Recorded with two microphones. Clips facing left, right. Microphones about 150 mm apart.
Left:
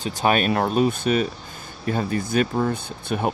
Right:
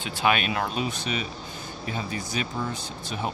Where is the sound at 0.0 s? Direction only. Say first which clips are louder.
Left 4 dB; 40° left (ahead or behind).